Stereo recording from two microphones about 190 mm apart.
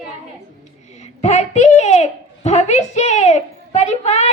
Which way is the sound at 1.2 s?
35° left (ahead or behind).